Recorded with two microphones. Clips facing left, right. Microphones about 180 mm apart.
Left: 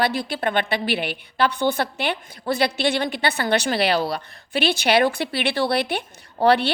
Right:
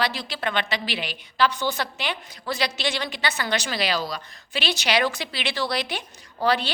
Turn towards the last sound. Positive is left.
turn(degrees=60)  # may be behind; listen again after turning